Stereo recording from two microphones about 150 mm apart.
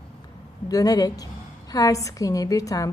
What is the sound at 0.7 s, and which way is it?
A woman's voice, 25° left (ahead or behind).